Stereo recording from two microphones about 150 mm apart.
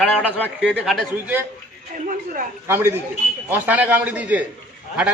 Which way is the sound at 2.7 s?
15° right (ahead or behind).